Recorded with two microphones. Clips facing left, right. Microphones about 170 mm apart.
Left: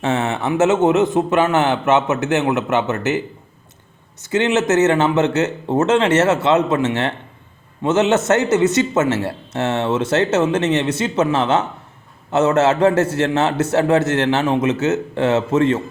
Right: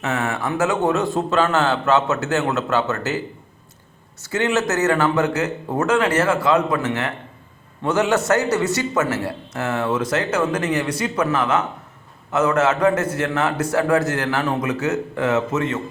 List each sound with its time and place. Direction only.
0.0 s speech: 25° left (ahead or behind)
4.2 s speech: 20° left (ahead or behind)